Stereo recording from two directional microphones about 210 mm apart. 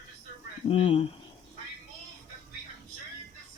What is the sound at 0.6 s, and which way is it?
Speech, 30° left (ahead or behind).